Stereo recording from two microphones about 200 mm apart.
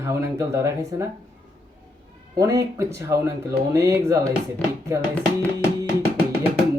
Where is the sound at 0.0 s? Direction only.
15° right (ahead or behind).